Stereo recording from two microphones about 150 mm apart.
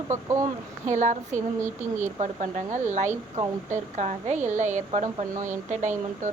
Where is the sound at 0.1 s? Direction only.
20° right (ahead or behind).